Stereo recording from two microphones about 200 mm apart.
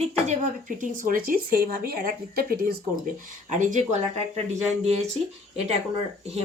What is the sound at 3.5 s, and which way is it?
Speech, 40° right (ahead or behind).